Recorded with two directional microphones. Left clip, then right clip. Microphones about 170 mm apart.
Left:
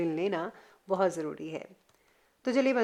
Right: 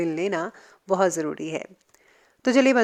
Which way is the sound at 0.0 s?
25° right (ahead or behind).